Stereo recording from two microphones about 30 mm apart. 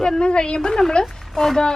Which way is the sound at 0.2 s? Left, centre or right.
Left.